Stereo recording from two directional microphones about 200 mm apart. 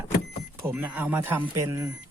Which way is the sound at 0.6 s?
10° right (ahead or behind).